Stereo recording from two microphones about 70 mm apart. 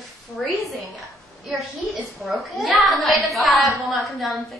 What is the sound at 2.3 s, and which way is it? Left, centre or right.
A woman's voice, centre.